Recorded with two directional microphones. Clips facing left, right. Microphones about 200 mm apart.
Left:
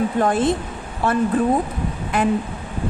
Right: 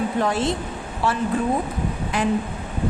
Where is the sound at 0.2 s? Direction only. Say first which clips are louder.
Left 4 dB; 50° left (ahead or behind).